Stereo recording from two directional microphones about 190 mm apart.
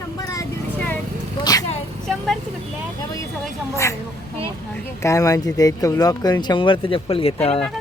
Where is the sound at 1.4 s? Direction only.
20° left (ahead or behind).